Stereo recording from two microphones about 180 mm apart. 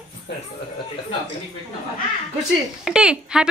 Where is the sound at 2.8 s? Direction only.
5° right (ahead or behind).